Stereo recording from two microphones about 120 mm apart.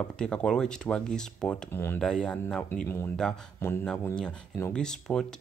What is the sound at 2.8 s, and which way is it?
Speech, 20° left (ahead or behind).